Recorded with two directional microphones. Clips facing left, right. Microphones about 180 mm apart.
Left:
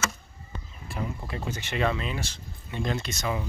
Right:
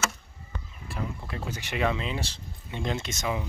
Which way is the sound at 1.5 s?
10° right (ahead or behind).